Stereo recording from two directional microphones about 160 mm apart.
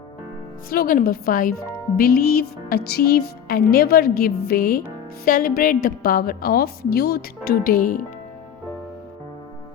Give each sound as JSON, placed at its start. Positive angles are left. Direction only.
{"t": 0.7, "sound": "a woman's voice", "side_deg": 65}